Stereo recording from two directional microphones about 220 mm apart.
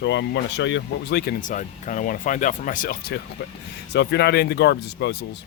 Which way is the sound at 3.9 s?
50° left (ahead or behind).